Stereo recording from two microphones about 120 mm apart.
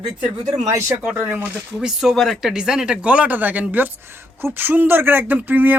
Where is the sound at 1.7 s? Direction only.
5° right (ahead or behind).